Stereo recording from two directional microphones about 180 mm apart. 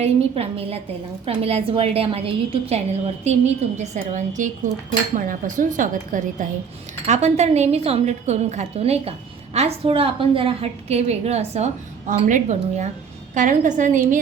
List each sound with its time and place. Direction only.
0.0 s a woman's voice: 35° right (ahead or behind)